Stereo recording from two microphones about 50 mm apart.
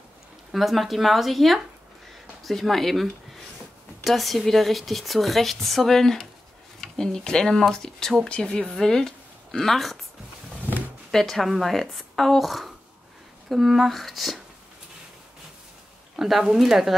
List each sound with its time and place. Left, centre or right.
0.5 s a woman's voice: centre
11.1 s speech: centre
16.2 s speech: centre